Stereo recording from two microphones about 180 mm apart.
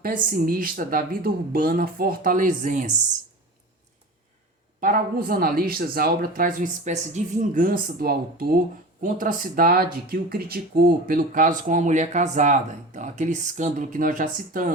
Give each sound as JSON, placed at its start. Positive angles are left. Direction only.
{"t": 0.0, "sound": "speech", "side_deg": -50}
{"t": 4.8, "sound": "speech", "side_deg": -50}